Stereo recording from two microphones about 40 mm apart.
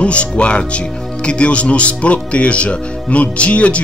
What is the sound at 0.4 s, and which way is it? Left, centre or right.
Speech, left.